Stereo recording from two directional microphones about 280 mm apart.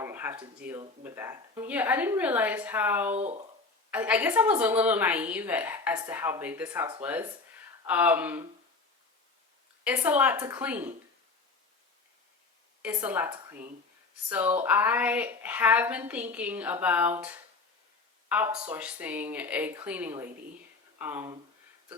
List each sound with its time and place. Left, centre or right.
0.0 s speech: centre
3.2 s speech: right
3.9 s a woman's voice: centre
9.8 s a woman's voice: centre
12.8 s a woman's voice: centre